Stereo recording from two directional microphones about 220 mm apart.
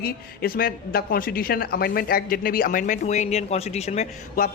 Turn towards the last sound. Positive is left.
turn(degrees=35)  # may be behind; listen again after turning